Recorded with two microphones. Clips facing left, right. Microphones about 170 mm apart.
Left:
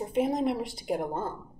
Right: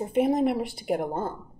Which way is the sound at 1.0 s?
10° right (ahead or behind).